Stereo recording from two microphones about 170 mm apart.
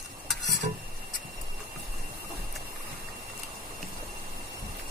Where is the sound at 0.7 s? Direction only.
40° right (ahead or behind).